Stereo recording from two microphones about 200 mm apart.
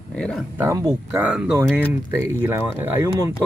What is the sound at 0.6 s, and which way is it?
Speech, 15° right (ahead or behind).